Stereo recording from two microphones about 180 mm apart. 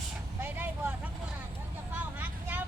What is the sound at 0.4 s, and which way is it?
Vehicle, 10° right (ahead or behind).